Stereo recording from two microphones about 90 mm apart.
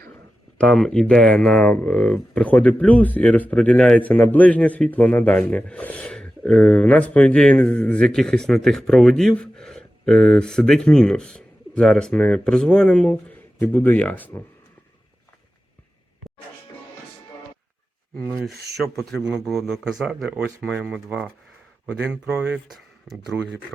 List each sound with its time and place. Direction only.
0.6 s speech: 5° left (ahead or behind); by 14.4 s 25° left (ahead or behind)
18.4 s speech: centre (ahead or behind)